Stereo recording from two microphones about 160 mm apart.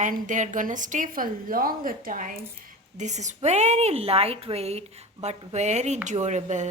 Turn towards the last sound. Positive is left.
turn(degrees=-45)  # may be behind; listen again after turning